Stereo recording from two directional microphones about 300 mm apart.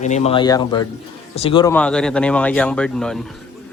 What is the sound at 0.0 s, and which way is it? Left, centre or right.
Speech, left.